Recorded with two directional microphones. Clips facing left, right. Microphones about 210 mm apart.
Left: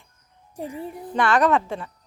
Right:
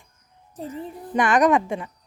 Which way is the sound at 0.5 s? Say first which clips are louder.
Left 1 dB; 10° left (ahead or behind).